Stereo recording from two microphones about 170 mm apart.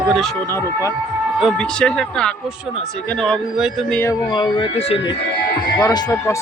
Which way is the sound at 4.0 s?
25° left (ahead or behind).